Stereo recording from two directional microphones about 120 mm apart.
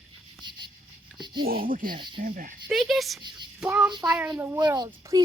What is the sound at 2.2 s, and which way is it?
Speech, 90° right.